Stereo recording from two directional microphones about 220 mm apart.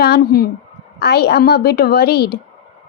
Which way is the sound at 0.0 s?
45° left (ahead or behind).